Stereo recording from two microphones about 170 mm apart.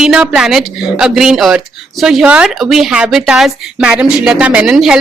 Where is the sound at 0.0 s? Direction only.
5° right (ahead or behind).